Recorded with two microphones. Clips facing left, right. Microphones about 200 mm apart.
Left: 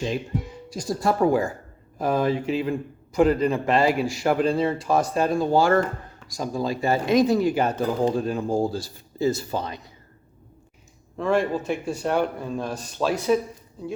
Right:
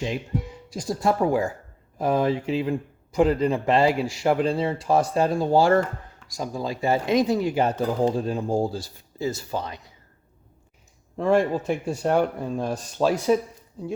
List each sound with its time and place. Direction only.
0.7 s speech: 25° right (ahead or behind)
6.2 s speech: 20° right (ahead or behind)
8.7 s speech: 15° right (ahead or behind)
11.2 s speech: 45° right (ahead or behind)